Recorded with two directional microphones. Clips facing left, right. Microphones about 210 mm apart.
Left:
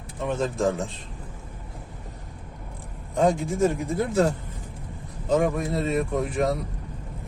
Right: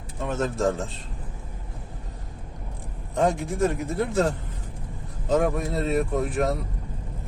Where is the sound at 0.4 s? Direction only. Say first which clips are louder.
Even; centre (ahead or behind).